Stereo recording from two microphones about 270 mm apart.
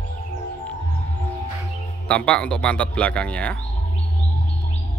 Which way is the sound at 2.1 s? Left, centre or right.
Centre.